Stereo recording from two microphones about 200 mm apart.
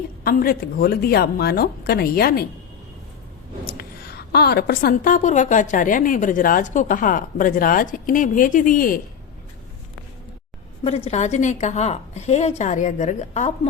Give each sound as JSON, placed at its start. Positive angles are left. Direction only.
{"t": 0.3, "sound": "a woman's voice", "side_deg": 45}
{"t": 3.7, "sound": "a woman's voice", "side_deg": 50}
{"t": 10.8, "sound": "a woman's voice", "side_deg": 30}